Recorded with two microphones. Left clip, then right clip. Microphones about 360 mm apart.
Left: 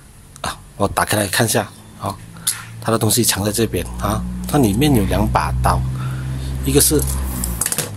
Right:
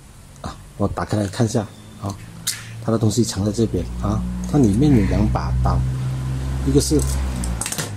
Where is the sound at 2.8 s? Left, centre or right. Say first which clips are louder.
Left 4 dB; left.